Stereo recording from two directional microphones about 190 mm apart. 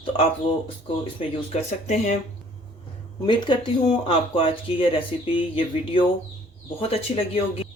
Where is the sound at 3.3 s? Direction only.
25° left (ahead or behind).